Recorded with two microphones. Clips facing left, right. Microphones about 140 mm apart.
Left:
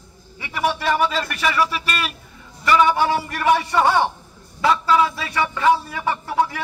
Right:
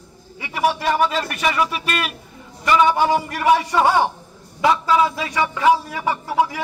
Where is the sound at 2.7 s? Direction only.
20° right (ahead or behind).